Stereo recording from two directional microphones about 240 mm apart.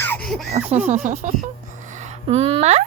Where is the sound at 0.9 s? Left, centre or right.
Right.